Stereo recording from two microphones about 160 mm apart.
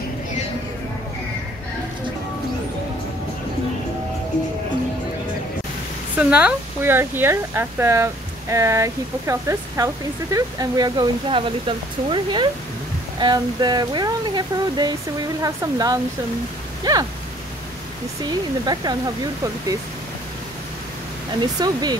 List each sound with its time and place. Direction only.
6.1 s speech: 10° right (ahead or behind)
19.4 s speech: 20° right (ahead or behind)
21.4 s speech: 25° right (ahead or behind)